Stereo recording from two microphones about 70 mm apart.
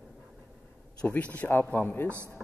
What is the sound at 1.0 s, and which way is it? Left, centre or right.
Speech, left.